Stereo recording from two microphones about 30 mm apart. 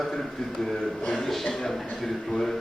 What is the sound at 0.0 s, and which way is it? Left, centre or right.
A man's voice, centre.